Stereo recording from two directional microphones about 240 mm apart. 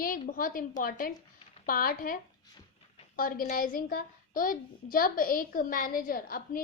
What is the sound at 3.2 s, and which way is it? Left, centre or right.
A child's voice, left.